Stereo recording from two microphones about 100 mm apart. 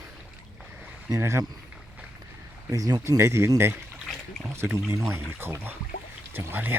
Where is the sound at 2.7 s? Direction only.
40° right (ahead or behind).